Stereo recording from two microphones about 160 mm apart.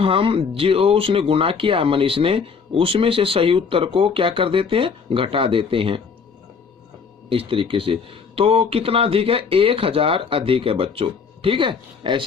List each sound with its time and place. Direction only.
0.0 s speech: 35° right (ahead or behind)
7.3 s speech: 35° right (ahead or behind)